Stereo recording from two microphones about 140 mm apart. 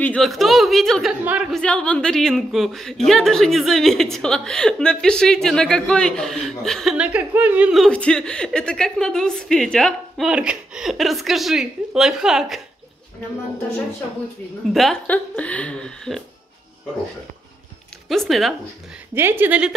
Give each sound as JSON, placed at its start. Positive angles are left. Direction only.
{"t": 0.0, "sound": "speech", "side_deg": 5}
{"t": 1.2, "sound": "speech", "side_deg": -10}
{"t": 1.5, "sound": "speech", "side_deg": 5}
{"t": 7.8, "sound": "speech", "side_deg": 5}
{"t": 10.3, "sound": "speech", "side_deg": -10}
{"t": 14.7, "sound": "speech", "side_deg": 0}
{"t": 18.0, "sound": "speech", "side_deg": 0}
{"t": 19.1, "sound": "speech", "side_deg": -15}